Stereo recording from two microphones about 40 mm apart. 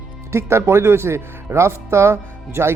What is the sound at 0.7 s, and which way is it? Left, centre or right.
Speech, right.